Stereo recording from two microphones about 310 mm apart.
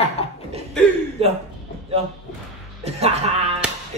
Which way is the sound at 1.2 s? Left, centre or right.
Centre.